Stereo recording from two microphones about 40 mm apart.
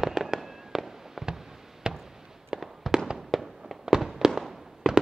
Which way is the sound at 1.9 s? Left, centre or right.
Centre.